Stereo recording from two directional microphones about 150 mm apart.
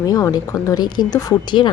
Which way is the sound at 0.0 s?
25° left (ahead or behind).